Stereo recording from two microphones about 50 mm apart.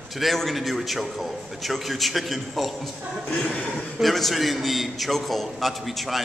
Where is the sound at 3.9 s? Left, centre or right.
Centre.